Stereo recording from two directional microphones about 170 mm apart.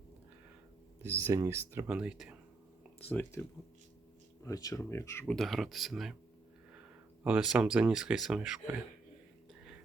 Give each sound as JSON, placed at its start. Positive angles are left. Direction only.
{"t": 1.0, "sound": "speech", "side_deg": -15}
{"t": 3.1, "sound": "speech", "side_deg": 10}
{"t": 4.4, "sound": "speech", "side_deg": 20}
{"t": 5.2, "sound": "speech", "side_deg": 0}
{"t": 7.3, "sound": "speech", "side_deg": -5}